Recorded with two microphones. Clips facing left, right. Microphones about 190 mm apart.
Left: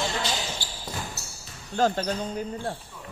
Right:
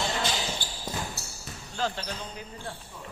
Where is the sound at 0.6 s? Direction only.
50° right (ahead or behind).